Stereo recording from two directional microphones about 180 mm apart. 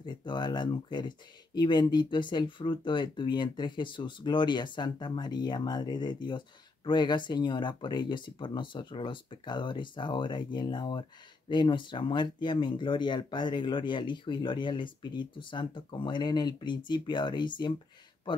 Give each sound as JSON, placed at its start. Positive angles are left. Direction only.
{"t": 0.0, "sound": "speech", "side_deg": 25}